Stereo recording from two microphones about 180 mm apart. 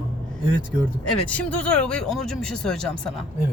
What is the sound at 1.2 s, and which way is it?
Speech, 5° left (ahead or behind).